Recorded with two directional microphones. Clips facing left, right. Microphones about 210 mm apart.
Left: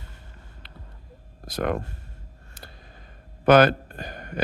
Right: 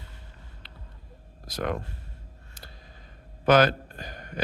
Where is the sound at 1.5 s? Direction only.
55° left (ahead or behind).